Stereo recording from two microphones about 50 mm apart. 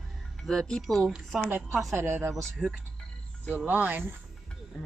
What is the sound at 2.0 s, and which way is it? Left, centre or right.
Speech, right.